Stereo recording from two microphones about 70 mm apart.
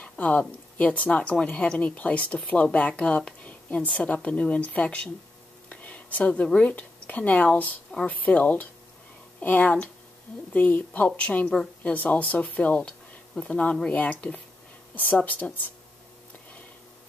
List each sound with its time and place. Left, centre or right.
0.0 s a woman's voice: centre